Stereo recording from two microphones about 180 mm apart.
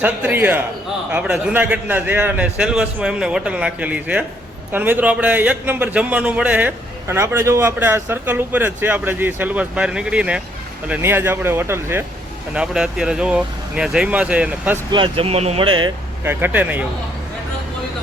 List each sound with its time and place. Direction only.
0.0 s a man's voice: 10° right (ahead or behind)
14.8 s speech: 25° right (ahead or behind)
16.2 s a man's voice: 10° right (ahead or behind)